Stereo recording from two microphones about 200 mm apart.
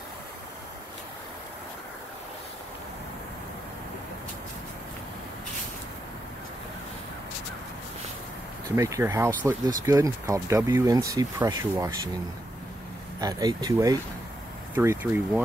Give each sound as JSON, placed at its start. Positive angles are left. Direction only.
{"t": 8.7, "sound": "speech", "side_deg": -15}
{"t": 13.2, "sound": "speech", "side_deg": -20}